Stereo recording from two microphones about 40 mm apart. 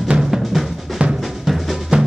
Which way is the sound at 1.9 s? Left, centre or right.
Right.